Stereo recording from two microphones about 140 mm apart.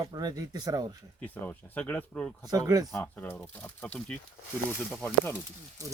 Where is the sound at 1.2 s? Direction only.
10° left (ahead or behind).